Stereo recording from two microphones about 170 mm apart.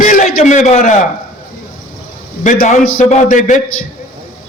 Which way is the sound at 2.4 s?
50° left (ahead or behind).